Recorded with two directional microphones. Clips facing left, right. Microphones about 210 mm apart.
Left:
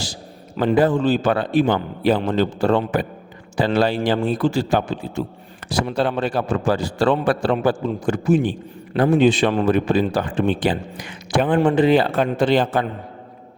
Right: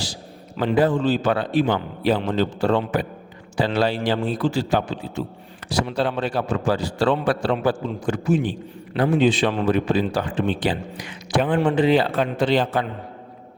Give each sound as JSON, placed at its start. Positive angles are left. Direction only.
{"t": 0.0, "sound": "a man's voice", "side_deg": 45}